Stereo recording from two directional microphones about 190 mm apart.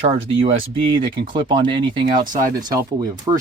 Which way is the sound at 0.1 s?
30° right (ahead or behind).